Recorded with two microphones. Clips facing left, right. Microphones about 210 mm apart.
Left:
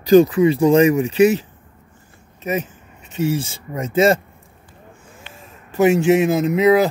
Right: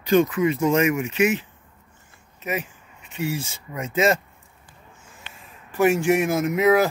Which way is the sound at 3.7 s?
30° left (ahead or behind).